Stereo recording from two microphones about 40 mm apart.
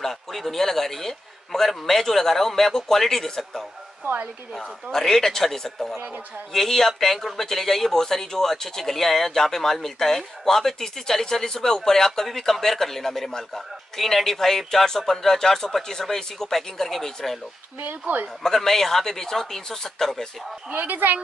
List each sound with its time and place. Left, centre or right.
0.0 s speech: centre
4.0 s speech: right
4.9 s speech: centre
17.7 s speech: right
18.4 s speech: centre
20.7 s speech: right